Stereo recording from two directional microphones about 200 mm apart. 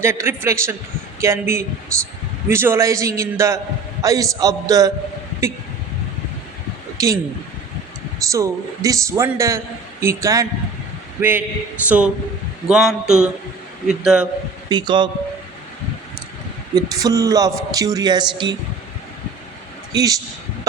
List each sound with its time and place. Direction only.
0.0 s speech: 10° right (ahead or behind)
7.0 s speech: 15° right (ahead or behind)
8.3 s speech: 15° right (ahead or behind)
14.7 s speech: 20° right (ahead or behind)
16.7 s speech: 15° right (ahead or behind)
19.9 s a man's voice: 15° right (ahead or behind)